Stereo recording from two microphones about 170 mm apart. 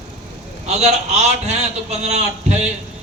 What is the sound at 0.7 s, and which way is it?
A man's voice, 40° right (ahead or behind).